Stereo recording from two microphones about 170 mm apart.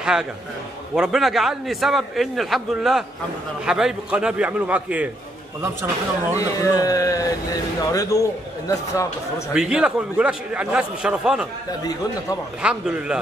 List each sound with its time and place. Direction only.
0.0 s a man's voice: 5° right (ahead or behind)
6.3 s a man's voice: 20° left (ahead or behind)
9.5 s a man's voice: 5° right (ahead or behind)
11.8 s a man's voice: 20° left (ahead or behind)
12.6 s a man's voice: 5° right (ahead or behind)